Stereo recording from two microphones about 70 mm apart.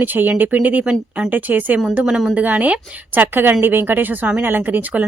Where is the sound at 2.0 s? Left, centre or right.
Centre.